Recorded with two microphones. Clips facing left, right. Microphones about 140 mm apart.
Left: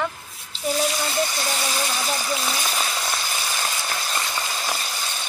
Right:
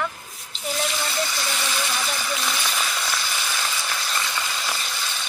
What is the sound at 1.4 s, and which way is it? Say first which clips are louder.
Speech: left 2 dB; 35° left (ahead or behind).